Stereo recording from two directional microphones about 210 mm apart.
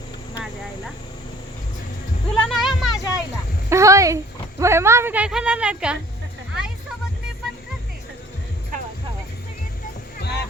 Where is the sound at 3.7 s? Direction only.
15° right (ahead or behind).